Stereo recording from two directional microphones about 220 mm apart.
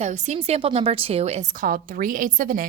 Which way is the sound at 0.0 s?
30° right (ahead or behind).